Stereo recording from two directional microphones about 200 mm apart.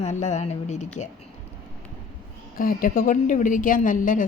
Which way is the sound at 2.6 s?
45° left (ahead or behind).